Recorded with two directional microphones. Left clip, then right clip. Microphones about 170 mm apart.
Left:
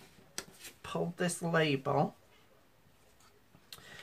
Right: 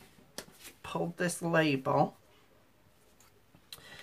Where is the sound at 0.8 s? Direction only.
15° right (ahead or behind).